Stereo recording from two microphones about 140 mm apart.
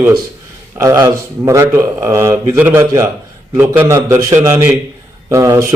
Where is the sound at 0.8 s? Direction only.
20° right (ahead or behind).